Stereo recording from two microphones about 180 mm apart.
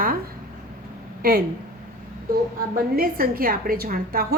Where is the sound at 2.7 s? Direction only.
55° right (ahead or behind).